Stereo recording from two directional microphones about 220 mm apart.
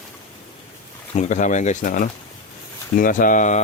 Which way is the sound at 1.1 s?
35° left (ahead or behind).